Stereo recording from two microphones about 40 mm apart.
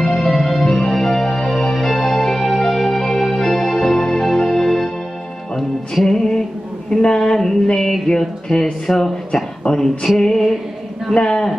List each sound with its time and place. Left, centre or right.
0.0 s music: centre
6.0 s music: centre
6.9 s a sound: centre
7.6 s music: centre
8.5 s speech: left
10.0 s music: centre